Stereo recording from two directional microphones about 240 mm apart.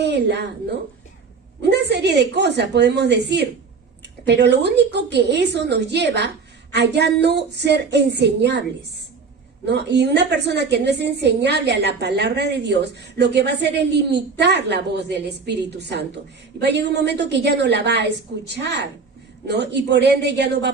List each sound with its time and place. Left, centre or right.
0.0 s a sound: right
1.7 s a woman's voice: right
9.6 s a woman's voice: right